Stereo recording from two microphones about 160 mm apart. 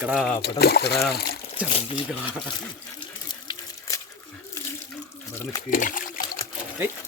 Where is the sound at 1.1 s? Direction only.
75° left (ahead or behind).